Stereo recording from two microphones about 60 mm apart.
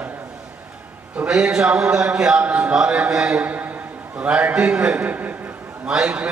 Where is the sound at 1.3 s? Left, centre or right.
Centre.